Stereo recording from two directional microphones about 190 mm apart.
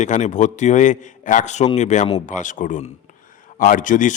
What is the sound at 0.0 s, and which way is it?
A man's voice, 40° left (ahead or behind).